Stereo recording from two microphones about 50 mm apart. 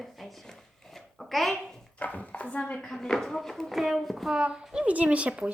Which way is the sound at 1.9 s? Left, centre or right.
Left.